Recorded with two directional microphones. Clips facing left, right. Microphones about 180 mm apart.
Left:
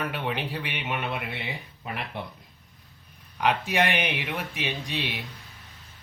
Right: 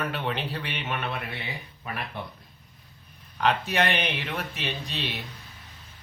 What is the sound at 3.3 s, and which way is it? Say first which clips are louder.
Speech: even; 10° left (ahead or behind).